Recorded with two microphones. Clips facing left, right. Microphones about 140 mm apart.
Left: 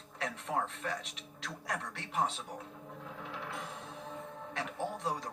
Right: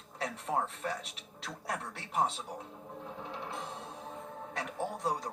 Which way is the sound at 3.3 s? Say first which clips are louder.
Right 1 dB; 30° right (ahead or behind).